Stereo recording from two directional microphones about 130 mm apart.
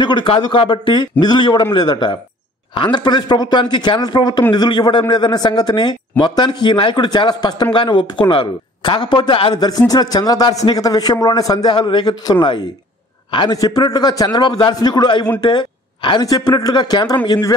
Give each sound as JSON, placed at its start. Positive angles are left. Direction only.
{"t": 0.0, "sound": "speech", "side_deg": 35}